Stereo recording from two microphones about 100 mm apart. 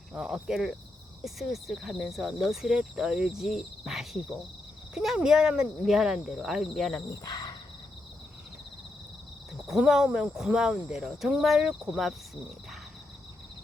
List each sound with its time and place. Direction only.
0.1 s speech: 10° right (ahead or behind)
7.3 s a sound: 45° left (ahead or behind)
9.6 s speech: 5° right (ahead or behind)